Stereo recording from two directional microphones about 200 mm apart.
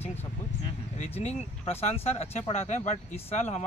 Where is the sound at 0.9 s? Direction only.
35° left (ahead or behind).